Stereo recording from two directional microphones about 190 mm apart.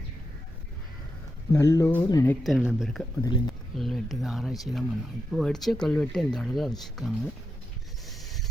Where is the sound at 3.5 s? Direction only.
Centre (ahead or behind).